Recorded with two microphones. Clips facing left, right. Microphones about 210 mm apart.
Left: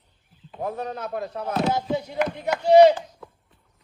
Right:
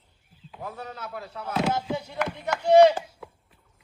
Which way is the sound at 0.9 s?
50° left (ahead or behind).